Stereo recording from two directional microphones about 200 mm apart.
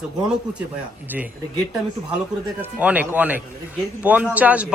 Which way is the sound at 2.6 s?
5° right (ahead or behind).